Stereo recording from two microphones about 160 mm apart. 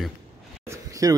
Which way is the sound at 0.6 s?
20° right (ahead or behind).